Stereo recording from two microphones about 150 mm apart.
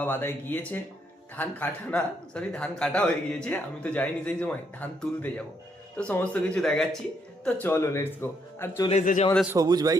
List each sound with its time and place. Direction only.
0.0 s speech: 15° left (ahead or behind)
8.9 s a man's voice: 55° left (ahead or behind)
9.5 s speech: 25° right (ahead or behind)